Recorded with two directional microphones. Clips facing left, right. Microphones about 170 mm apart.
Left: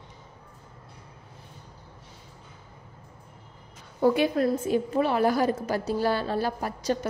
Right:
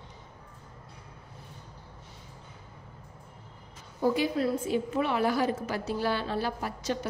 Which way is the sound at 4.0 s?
60° left (ahead or behind).